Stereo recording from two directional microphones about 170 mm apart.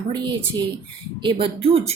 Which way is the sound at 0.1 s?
25° right (ahead or behind).